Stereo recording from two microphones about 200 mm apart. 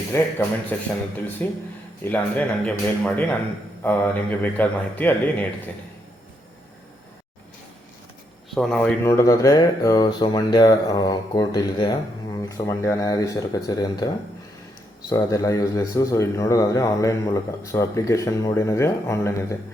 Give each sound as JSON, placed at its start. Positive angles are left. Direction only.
{"t": 0.1, "sound": "speech", "side_deg": 10}
{"t": 8.4, "sound": "speech", "side_deg": 5}
{"t": 9.0, "sound": "speech", "side_deg": 15}
{"t": 15.1, "sound": "speech", "side_deg": 15}